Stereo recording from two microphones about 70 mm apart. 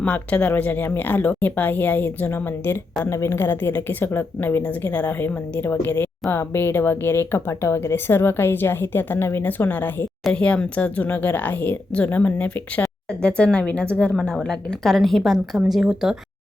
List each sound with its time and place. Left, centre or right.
0.0 s speech: left
3.1 s speech: left; by 16.1 s centre